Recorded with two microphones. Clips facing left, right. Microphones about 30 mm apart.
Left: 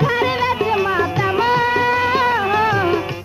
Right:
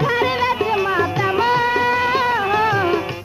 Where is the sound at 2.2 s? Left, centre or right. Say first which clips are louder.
Left 1 dB; centre.